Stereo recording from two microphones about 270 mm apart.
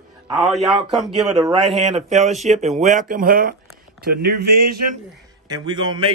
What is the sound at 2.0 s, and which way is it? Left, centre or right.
Speech, right.